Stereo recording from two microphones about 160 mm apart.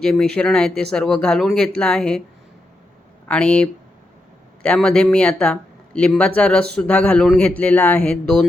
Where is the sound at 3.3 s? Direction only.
5° left (ahead or behind).